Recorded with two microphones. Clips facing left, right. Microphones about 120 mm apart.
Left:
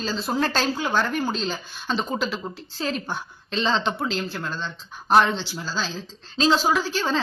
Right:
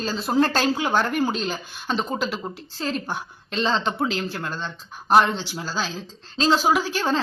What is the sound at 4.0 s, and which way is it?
Speech, 20° right (ahead or behind).